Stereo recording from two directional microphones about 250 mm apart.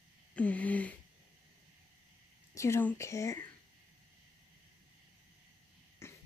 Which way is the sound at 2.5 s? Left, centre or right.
Centre.